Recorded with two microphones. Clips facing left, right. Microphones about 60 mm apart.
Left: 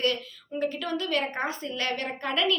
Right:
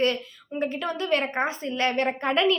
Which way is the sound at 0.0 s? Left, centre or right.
Right.